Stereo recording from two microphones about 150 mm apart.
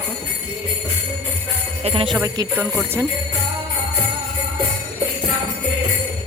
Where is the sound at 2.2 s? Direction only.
25° right (ahead or behind).